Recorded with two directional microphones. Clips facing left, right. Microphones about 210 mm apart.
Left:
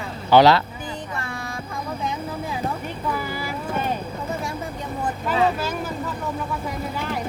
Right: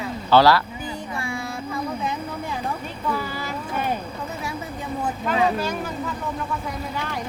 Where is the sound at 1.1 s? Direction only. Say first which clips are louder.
Right 2 dB; 10° right (ahead or behind).